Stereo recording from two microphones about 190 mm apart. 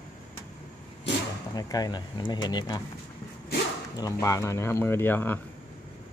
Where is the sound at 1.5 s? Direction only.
20° left (ahead or behind).